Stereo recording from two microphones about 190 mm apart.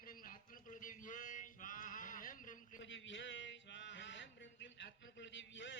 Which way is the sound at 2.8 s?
80° left.